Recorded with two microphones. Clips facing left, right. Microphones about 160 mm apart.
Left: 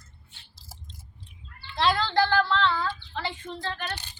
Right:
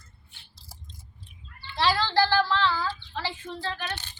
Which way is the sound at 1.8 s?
Centre (ahead or behind).